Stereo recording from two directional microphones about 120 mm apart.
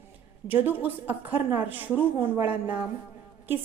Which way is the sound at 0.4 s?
15° right (ahead or behind).